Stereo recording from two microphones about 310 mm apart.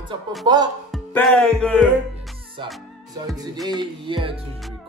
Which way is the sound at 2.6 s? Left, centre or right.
Centre.